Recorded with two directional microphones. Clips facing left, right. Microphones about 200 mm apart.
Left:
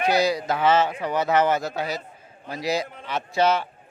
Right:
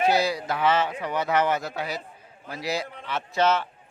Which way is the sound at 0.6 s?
40° left (ahead or behind).